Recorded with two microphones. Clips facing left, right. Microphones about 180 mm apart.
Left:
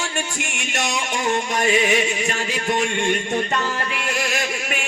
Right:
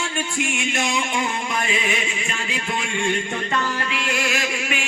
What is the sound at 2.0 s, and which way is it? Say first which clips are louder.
Chant: left 6 dB; 40° left (ahead or behind).